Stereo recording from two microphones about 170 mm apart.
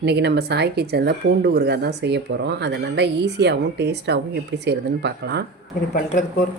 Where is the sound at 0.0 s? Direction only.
85° right.